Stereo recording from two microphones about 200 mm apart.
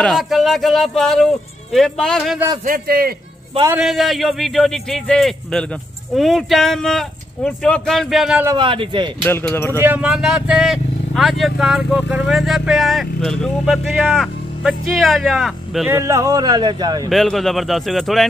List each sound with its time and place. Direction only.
0.0 s speech: centre (ahead or behind)
2.6 s a man's voice: 45° right (ahead or behind)
3.7 s speech: centre (ahead or behind)
8.5 s speech: 25° right (ahead or behind)
9.2 s speech: 10° left (ahead or behind)
9.8 s speech: 10° right (ahead or behind)
15.9 s speech: 15° right (ahead or behind)
17.1 s speech: centre (ahead or behind)